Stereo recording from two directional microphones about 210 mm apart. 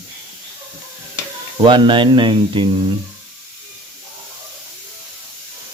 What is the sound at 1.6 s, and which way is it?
Speech, 20° right (ahead or behind).